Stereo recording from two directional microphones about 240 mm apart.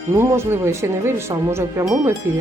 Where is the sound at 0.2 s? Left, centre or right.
Centre.